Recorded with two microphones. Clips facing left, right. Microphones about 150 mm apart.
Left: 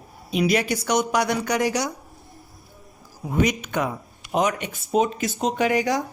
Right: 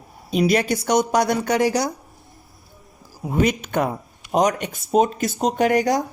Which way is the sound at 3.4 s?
30° right (ahead or behind).